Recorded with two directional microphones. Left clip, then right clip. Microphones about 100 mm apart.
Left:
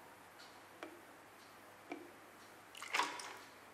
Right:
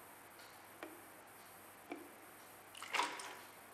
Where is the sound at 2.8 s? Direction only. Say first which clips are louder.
Left 1 dB; centre (ahead or behind).